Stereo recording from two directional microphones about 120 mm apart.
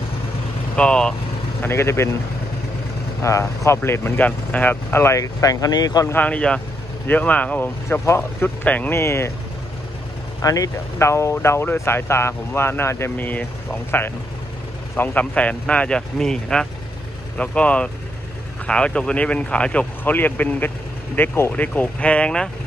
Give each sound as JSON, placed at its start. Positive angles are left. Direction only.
{"t": 0.7, "sound": "speech", "side_deg": 5}
{"t": 1.6, "sound": "speech", "side_deg": 20}
{"t": 3.2, "sound": "speech", "side_deg": 25}
{"t": 6.1, "sound": "speech", "side_deg": 10}
{"t": 10.4, "sound": "speech", "side_deg": 30}
{"t": 15.0, "sound": "speech", "side_deg": 10}